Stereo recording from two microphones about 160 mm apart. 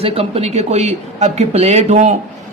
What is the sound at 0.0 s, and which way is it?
A man's voice, 40° right (ahead or behind).